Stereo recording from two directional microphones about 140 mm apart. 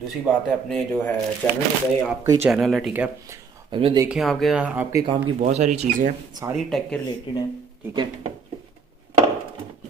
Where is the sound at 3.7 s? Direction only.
40° right (ahead or behind).